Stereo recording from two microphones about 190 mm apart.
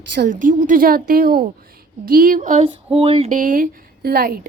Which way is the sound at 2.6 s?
30° right (ahead or behind).